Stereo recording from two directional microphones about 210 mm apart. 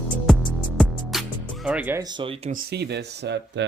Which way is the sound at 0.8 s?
Centre (ahead or behind).